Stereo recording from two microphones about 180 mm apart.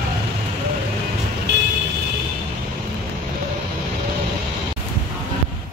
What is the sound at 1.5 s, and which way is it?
Vehicle, 70° right (ahead or behind).